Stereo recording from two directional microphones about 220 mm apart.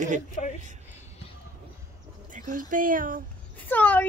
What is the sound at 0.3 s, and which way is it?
Speech, 35° left (ahead or behind).